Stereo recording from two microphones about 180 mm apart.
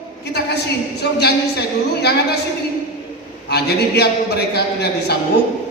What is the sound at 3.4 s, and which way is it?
A woman's voice, 65° left (ahead or behind).